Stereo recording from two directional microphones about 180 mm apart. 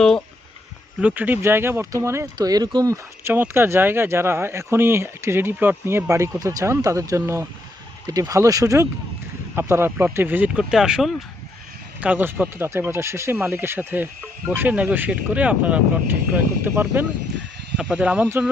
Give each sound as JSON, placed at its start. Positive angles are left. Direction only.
{"t": 1.0, "sound": "speech", "side_deg": -10}